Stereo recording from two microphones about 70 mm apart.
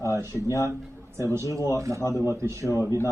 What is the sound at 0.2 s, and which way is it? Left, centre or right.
A man's voice, right.